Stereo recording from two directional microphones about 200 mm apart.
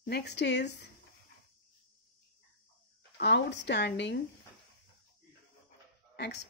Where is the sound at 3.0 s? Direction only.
60° left (ahead or behind).